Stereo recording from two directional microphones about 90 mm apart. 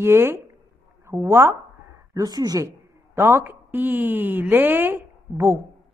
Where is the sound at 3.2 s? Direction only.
25° right (ahead or behind).